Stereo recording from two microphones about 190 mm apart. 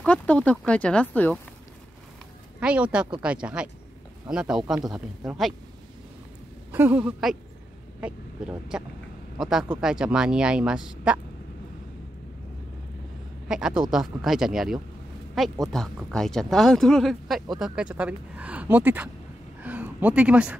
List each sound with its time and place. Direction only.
0.0 s speech: 5° left (ahead or behind)
2.6 s speech: 5° right (ahead or behind)
6.7 s speech: 10° right (ahead or behind)
13.5 s speech: 5° right (ahead or behind)